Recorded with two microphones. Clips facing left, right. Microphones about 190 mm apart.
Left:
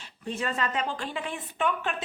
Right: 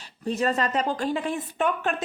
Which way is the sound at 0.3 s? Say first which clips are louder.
Right 6 dB; 40° right (ahead or behind).